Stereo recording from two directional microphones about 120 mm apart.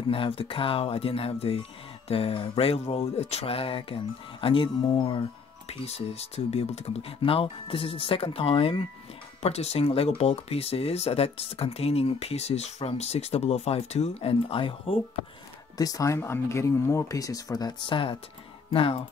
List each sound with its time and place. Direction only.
0.1 s speech: 50° left (ahead or behind)
4.8 s music: 40° left (ahead or behind)
5.7 s speech: 60° left (ahead or behind)
15.8 s speech: 30° left (ahead or behind); by 19.0 s 50° left (ahead or behind)